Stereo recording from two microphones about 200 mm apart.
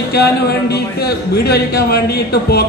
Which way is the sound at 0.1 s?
55° left (ahead or behind).